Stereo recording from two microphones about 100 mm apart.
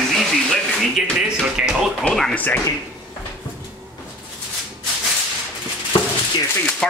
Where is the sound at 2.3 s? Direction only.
15° left (ahead or behind).